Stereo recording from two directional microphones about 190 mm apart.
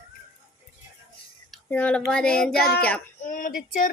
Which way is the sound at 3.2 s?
45° left (ahead or behind).